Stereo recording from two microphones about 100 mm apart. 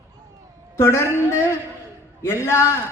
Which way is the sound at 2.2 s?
30° left (ahead or behind).